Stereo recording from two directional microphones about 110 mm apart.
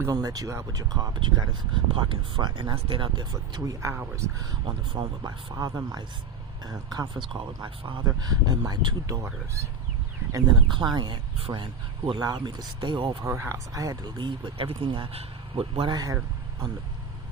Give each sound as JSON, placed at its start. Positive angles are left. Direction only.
{"t": 0.1, "sound": "speech", "side_deg": -35}
{"t": 2.7, "sound": "speech", "side_deg": -55}
{"t": 3.6, "sound": "speech", "side_deg": -30}
{"t": 4.9, "sound": "speech", "side_deg": -35}
{"t": 9.0, "sound": "speech", "side_deg": -30}
{"t": 10.7, "sound": "speech", "side_deg": -45}
{"t": 13.1, "sound": "speech", "side_deg": -25}
{"t": 15.9, "sound": "speech", "side_deg": -35}